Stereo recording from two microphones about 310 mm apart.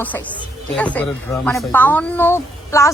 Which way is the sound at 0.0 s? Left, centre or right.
Centre.